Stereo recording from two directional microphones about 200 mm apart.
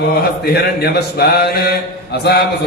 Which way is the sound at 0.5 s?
55° left (ahead or behind).